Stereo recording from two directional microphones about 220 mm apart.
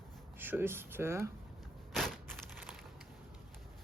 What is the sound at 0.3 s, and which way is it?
Speech, 10° right (ahead or behind).